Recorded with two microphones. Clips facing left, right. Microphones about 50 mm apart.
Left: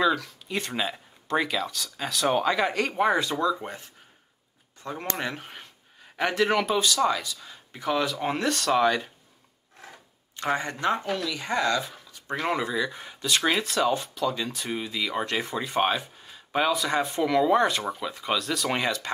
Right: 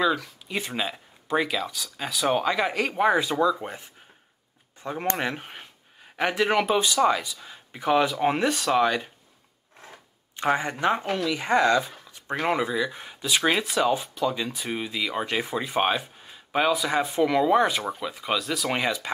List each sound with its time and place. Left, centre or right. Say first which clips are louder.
0.0 s speech: even; centre
5.1 s speech: right 3 dB; centre
10.3 s speech: right 3 dB; centre
12.3 s speech: right 2 dB; centre